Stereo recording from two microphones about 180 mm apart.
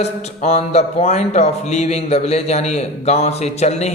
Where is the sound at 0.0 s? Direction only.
35° left (ahead or behind).